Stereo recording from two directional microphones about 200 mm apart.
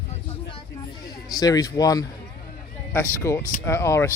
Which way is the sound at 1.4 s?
20° left (ahead or behind).